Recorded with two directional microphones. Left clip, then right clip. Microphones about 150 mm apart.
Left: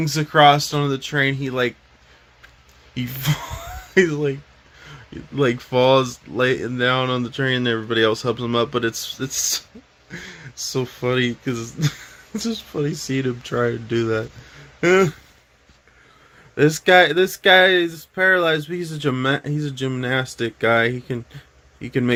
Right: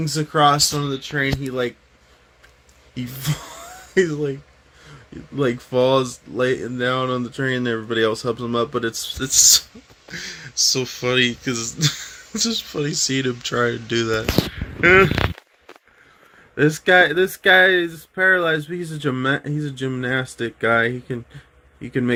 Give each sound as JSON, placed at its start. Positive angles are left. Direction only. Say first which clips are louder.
{"t": 0.0, "sound": "speech", "louder": "left 3 dB", "side_deg": 15}
{"t": 2.9, "sound": "speech", "louder": "left 3 dB", "side_deg": 20}
{"t": 5.4, "sound": "speech", "louder": "left 1 dB", "side_deg": 10}
{"t": 10.1, "sound": "speech", "louder": "right 4 dB", "side_deg": 25}
{"t": 16.6, "sound": "speech", "louder": "left 1 dB", "side_deg": 25}